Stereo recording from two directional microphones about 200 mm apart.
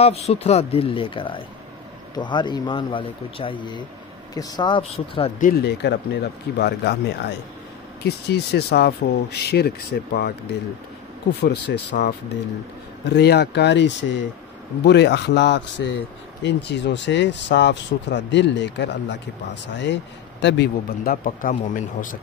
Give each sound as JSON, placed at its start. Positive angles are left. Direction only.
{"t": 0.0, "sound": "speech", "side_deg": 30}
{"t": 5.4, "sound": "speech", "side_deg": 50}
{"t": 11.4, "sound": "speech", "side_deg": 55}